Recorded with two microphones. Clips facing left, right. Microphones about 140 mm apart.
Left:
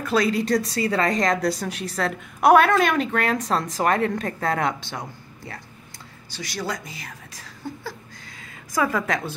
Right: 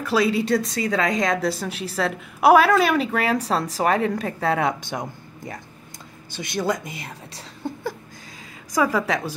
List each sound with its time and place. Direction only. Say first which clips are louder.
0.0 s a woman's voice: right 1 dB; 5° right (ahead or behind)
6.3 s speech: right 5 dB; 20° right (ahead or behind)
8.7 s speech: right 2 dB; 10° right (ahead or behind)